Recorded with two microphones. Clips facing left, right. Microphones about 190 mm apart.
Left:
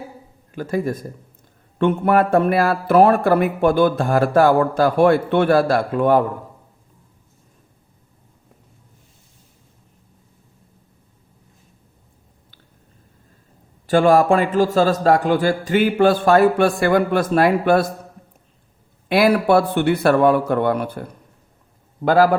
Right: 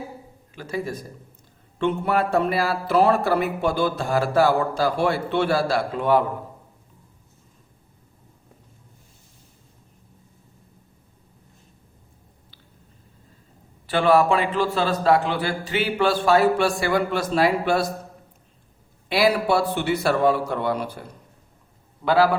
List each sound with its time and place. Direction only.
0.5 s speech: 50° left (ahead or behind)
13.8 s speech: 45° left (ahead or behind)
19.0 s a man's voice: 55° left (ahead or behind)